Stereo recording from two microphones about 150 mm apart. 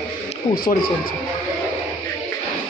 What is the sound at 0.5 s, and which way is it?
Speech, 80° left.